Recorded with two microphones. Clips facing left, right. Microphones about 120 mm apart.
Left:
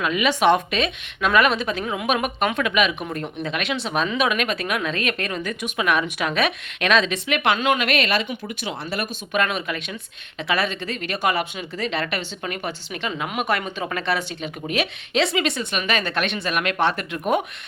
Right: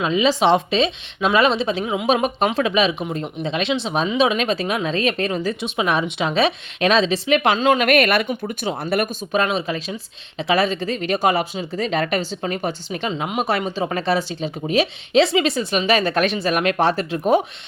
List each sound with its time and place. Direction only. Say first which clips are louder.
0.0 s speech: right 2 dB; 25° right (ahead or behind)
1.8 s speech: right 4 dB; 20° right (ahead or behind)
2.0 s speech: right 4 dB; 30° right (ahead or behind)
3.0 s speech: right 3 dB; 20° right (ahead or behind); by 9.0 s 50° right (ahead or behind)
9.3 s speech: right 2 dB; 30° right (ahead or behind)